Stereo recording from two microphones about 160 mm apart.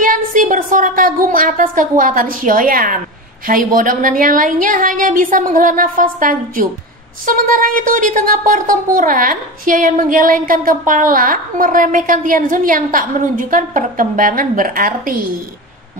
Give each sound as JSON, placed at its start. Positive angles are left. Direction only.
{"t": 0.0, "sound": "speech", "side_deg": -60}